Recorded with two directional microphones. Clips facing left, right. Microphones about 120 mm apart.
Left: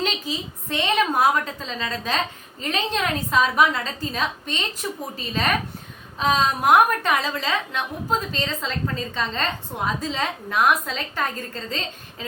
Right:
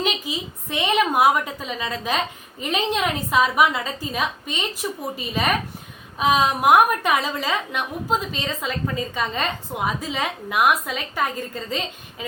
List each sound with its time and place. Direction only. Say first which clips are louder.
0.0 s a woman's voice: right 1 dB; 10° right (ahead or behind)